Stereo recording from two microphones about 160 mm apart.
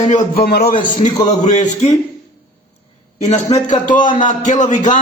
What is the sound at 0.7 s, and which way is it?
A man's voice, 55° left (ahead or behind).